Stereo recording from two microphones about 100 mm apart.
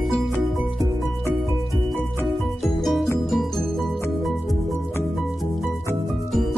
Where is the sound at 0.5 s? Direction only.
Centre (ahead or behind).